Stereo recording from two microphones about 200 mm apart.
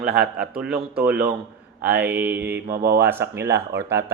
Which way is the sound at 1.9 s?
10° right (ahead or behind).